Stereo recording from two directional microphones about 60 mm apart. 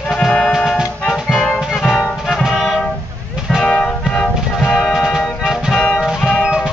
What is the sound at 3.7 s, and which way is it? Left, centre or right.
Music, centre.